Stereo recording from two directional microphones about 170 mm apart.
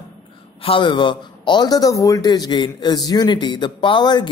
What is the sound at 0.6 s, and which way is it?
A man's voice, 30° left (ahead or behind).